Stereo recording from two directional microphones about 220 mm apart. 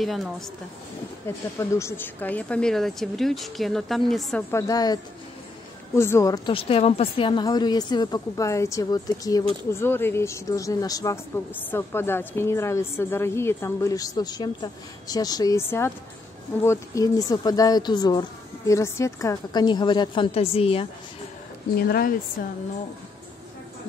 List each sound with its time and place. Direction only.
0.0 s a woman's voice: centre (ahead or behind)
1.6 s a woman's voice: 10° left (ahead or behind)
21.7 s speech: 45° left (ahead or behind)